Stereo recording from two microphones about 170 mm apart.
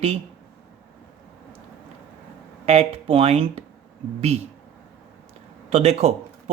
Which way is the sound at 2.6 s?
35° right (ahead or behind).